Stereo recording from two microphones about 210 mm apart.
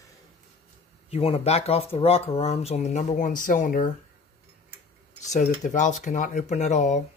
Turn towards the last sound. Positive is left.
turn(degrees=35)  # may be behind; listen again after turning